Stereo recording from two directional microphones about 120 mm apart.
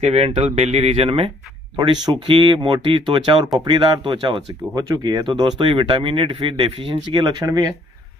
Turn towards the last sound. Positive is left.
turn(degrees=-30)  # may be behind; listen again after turning